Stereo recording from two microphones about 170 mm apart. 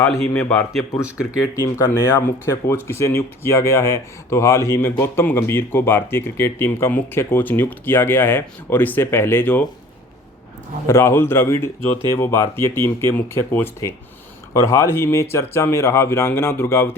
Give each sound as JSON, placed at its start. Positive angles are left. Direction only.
{"t": 0.0, "sound": "speech", "side_deg": 10}
{"t": 1.0, "sound": "speech", "side_deg": -5}
{"t": 1.6, "sound": "speech", "side_deg": 15}
{"t": 10.8, "sound": "speech", "side_deg": 15}